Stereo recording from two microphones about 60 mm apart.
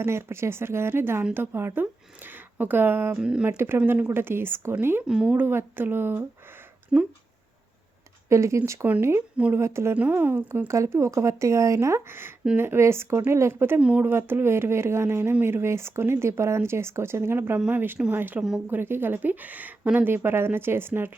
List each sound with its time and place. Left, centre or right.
0.0 s a woman's voice: right
3.2 s speech: centre
4.1 s speech: right
5.0 s speech: centre
5.3 s speech: right
6.9 s speech: centre
8.3 s speech: right
9.9 s speech: right
10.7 s speech: right
13.7 s a woman's voice: right
14.0 s speech: right
18.3 s speech: centre
18.7 s a woman's voice: right
20.1 s speech: right